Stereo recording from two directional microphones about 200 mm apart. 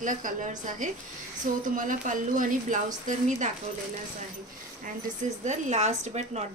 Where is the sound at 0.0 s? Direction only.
40° right (ahead or behind).